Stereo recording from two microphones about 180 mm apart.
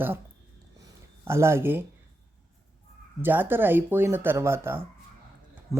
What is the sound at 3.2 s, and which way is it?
Speech, 10° right (ahead or behind).